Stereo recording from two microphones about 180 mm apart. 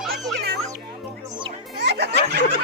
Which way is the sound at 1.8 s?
70° right (ahead or behind).